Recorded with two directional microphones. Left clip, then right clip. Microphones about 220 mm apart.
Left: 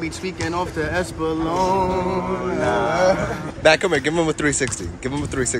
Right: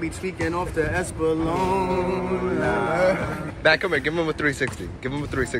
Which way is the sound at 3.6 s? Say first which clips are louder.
Left 4 dB; 10° left (ahead or behind).